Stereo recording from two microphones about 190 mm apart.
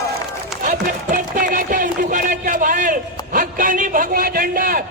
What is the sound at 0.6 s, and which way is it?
Music, 45° right (ahead or behind).